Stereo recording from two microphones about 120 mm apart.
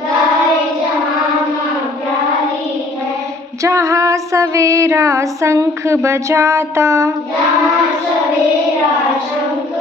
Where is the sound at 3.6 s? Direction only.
25° right (ahead or behind).